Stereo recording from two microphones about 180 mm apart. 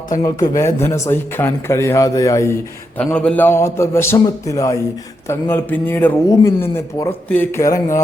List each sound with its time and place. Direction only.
0.2 s speech: 20° left (ahead or behind)